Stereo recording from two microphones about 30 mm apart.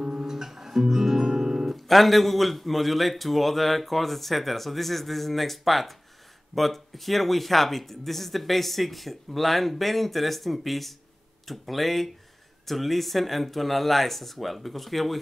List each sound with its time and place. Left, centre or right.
0.0 s guitar: centre
1.7 s speech: centre